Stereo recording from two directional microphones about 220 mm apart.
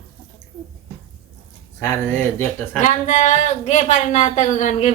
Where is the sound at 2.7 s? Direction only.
35° left (ahead or behind).